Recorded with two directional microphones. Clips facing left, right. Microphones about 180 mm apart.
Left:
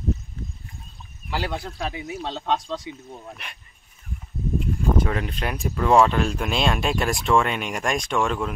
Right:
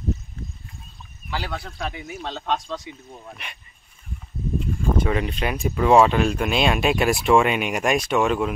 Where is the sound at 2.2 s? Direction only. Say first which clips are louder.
Even; 20° left (ahead or behind).